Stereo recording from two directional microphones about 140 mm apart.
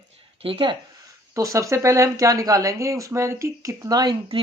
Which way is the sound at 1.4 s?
25° right (ahead or behind).